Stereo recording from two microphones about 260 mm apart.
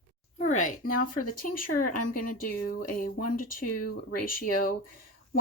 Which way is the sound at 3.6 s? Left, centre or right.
Left.